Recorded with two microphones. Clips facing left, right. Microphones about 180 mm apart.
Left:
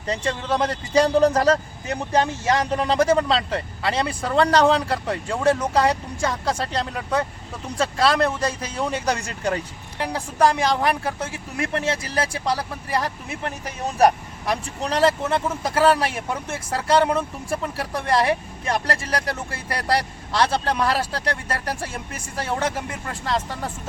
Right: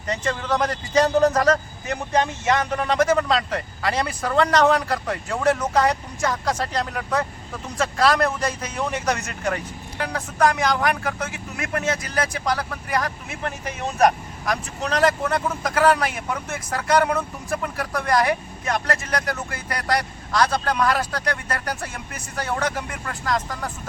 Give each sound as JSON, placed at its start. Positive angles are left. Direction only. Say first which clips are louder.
{"t": 0.1, "sound": "speech", "louder": "even", "side_deg": 30}